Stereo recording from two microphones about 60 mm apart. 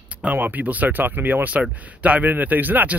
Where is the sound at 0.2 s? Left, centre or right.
Right.